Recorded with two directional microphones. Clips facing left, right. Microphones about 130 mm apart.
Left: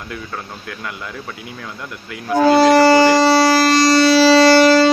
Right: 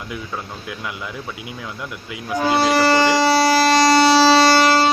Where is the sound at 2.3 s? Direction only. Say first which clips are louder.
Left 7 dB; 90° left.